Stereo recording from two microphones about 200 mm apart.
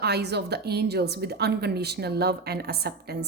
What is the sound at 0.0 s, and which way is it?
A woman's voice, 55° right (ahead or behind).